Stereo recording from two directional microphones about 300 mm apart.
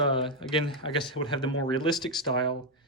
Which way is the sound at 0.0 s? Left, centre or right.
Centre.